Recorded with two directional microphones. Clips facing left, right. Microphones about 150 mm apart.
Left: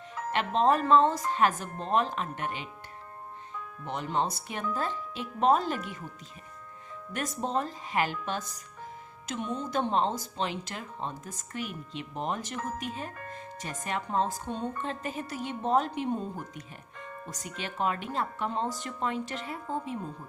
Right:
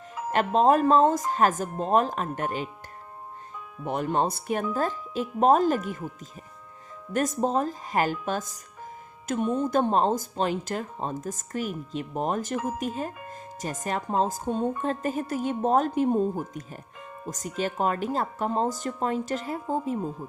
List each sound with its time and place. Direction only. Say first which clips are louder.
0.3 s speech: right 5 dB; 45° right (ahead or behind)
3.8 s speech: right 5 dB; 50° right (ahead or behind)
7.1 s speech: right 7 dB; 45° right (ahead or behind)
17.2 s speech: right 11 dB; 45° right (ahead or behind)